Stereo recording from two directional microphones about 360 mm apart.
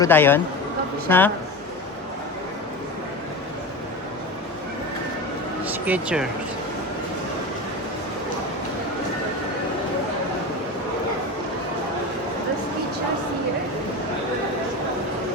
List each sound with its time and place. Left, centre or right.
0.0 s speech: centre
5.8 s speech: centre